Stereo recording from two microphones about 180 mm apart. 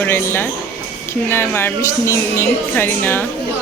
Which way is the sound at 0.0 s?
10° left (ahead or behind).